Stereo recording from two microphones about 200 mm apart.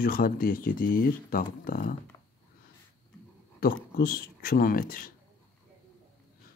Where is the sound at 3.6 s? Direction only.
50° left (ahead or behind).